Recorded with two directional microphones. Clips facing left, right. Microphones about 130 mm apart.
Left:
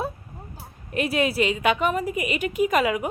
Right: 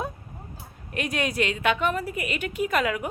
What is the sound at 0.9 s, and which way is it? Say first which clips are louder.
A woman's voice: left 4 dB; 5° left (ahead or behind).